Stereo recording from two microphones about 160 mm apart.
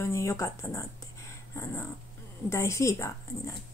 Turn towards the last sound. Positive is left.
turn(degrees=20)  # may be behind; listen again after turning